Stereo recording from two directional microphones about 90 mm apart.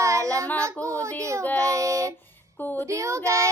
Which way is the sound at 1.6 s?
35° right (ahead or behind).